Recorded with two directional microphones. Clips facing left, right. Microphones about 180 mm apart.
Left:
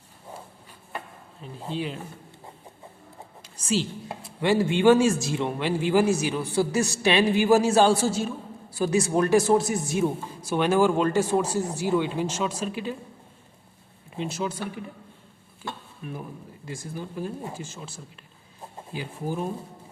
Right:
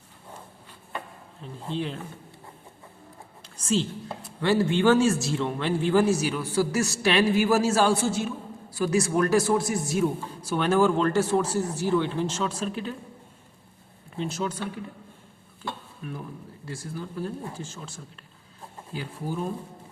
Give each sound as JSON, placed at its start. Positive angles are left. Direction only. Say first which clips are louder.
{"t": 1.6, "sound": "speech", "louder": "even", "side_deg": 5}
{"t": 4.4, "sound": "a man's voice", "louder": "even", "side_deg": 15}
{"t": 8.8, "sound": "speech", "louder": "left 1 dB", "side_deg": 20}
{"t": 10.5, "sound": "a man's voice", "louder": "left 1 dB", "side_deg": 10}
{"t": 14.2, "sound": "a man's voice", "louder": "even", "side_deg": 10}
{"t": 15.6, "sound": "a sound", "louder": "right 1 dB", "side_deg": 15}
{"t": 16.6, "sound": "a man's voice", "louder": "even", "side_deg": 15}